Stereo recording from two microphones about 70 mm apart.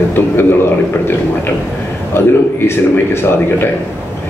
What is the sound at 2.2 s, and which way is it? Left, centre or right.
Speech, left.